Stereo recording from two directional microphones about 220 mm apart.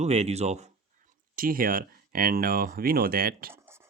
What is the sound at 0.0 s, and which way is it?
Speech, 30° right (ahead or behind).